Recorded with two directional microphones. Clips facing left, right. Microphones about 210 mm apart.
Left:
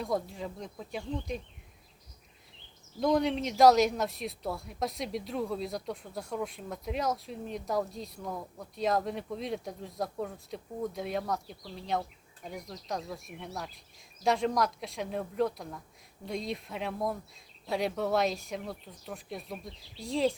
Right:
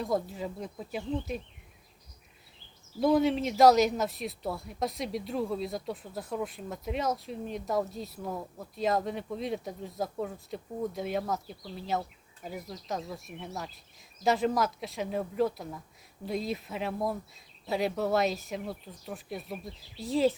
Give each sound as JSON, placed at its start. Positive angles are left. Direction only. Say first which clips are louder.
{"t": 0.0, "sound": "speech", "louder": "right 2 dB", "side_deg": 0}
{"t": 3.0, "sound": "speech", "louder": "right 3 dB", "side_deg": -5}